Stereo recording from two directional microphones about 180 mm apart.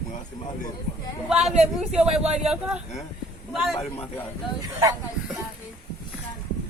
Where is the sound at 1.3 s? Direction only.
5° right (ahead or behind).